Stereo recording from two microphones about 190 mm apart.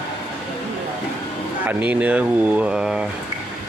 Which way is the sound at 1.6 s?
10° right (ahead or behind).